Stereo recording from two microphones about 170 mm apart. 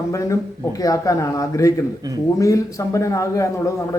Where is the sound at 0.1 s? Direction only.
20° left (ahead or behind).